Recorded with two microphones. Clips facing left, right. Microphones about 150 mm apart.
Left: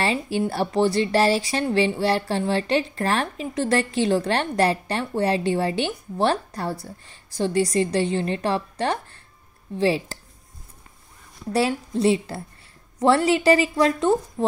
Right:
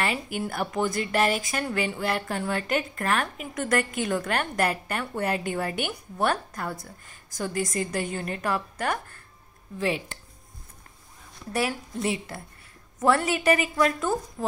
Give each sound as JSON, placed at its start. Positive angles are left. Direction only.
{"t": 0.0, "sound": "speech", "side_deg": 30}
{"t": 12.0, "sound": "speech", "side_deg": 30}